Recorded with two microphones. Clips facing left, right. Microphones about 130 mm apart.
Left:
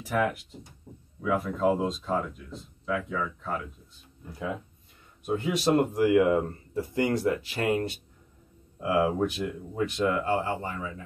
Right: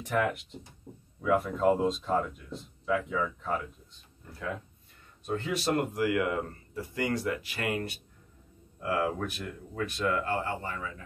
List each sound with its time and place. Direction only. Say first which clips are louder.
0.0 s speech: left 2 dB; 5° left (ahead or behind)
4.2 s speech: left 3 dB; 15° left (ahead or behind)